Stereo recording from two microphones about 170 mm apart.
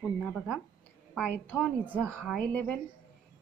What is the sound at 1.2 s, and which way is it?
A woman's voice, 10° left (ahead or behind).